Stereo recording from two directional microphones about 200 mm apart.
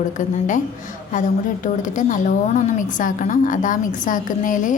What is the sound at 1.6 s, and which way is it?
A woman's voice, 40° left (ahead or behind).